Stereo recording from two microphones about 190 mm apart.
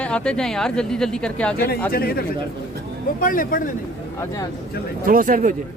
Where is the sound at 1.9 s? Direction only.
55° left (ahead or behind).